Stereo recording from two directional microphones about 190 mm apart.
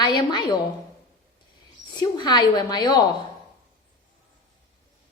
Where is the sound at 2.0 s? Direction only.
25° left (ahead or behind).